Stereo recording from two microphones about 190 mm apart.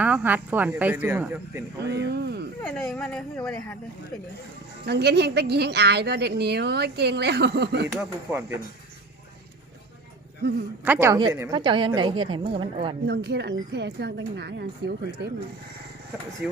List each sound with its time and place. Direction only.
0.0 s speech: 10° right (ahead or behind)
1.8 s a woman's voice: 60° right (ahead or behind)
2.6 s speech: 5° left (ahead or behind)
4.9 s a woman's voice: 60° right (ahead or behind)
7.9 s speech: 10° right (ahead or behind)
10.8 s speech: 10° right (ahead or behind)
11.2 s a woman's voice: 20° right (ahead or behind)
13.1 s a woman's voice: 60° right (ahead or behind)
16.4 s speech: 5° right (ahead or behind)